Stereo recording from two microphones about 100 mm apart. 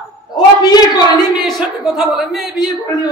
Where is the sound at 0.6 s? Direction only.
40° left (ahead or behind).